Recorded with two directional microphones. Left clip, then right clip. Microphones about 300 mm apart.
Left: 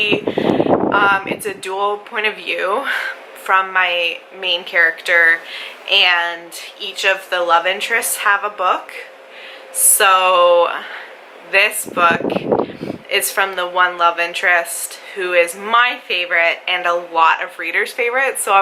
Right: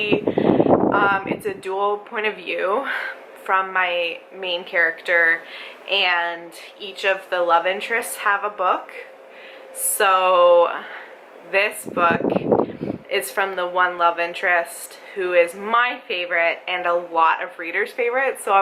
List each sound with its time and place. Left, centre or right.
0.9 s speech: centre
12.2 s speech: right
13.1 s speech: centre